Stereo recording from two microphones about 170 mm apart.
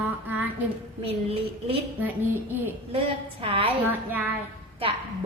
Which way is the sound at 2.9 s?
35° right (ahead or behind).